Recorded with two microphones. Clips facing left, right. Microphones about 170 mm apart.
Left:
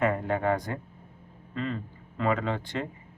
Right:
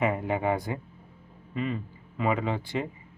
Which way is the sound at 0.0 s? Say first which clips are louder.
Even; 10° right (ahead or behind).